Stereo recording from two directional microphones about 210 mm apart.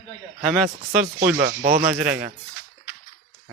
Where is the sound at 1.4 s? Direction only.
45° right (ahead or behind).